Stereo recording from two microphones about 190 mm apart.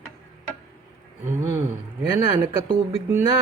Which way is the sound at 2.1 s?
15° right (ahead or behind).